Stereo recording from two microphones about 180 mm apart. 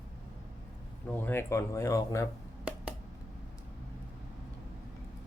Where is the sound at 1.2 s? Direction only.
10° left (ahead or behind).